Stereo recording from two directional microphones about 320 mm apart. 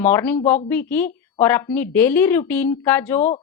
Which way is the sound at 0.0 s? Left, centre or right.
Centre.